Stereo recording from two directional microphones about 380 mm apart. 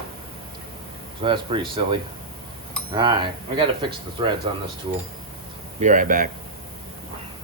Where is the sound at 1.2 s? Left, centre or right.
Centre.